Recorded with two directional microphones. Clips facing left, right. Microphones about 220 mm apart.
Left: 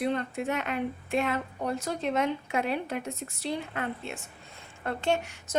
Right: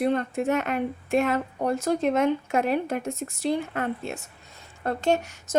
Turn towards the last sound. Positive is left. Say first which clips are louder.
# right 4 dB
turn(degrees=-40)  # may be behind; listen again after turning